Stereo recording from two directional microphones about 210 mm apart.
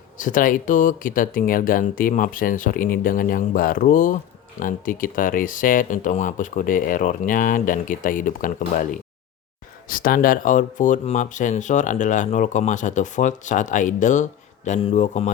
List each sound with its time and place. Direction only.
0.2 s speech: 40° left (ahead or behind)